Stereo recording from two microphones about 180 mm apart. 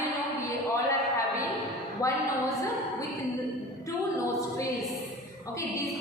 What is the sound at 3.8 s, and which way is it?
A capella, 15° left (ahead or behind).